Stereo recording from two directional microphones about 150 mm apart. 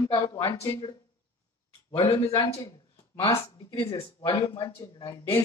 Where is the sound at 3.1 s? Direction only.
20° left (ahead or behind).